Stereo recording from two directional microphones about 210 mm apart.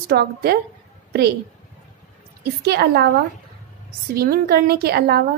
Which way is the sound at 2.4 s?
50° right (ahead or behind).